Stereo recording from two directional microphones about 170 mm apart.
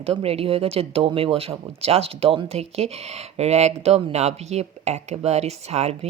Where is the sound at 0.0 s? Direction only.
35° right (ahead or behind).